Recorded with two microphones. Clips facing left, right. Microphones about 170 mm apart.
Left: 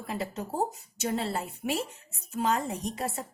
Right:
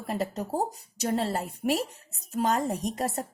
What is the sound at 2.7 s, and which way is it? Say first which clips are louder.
Speech: right 3 dB; 45° right (ahead or behind).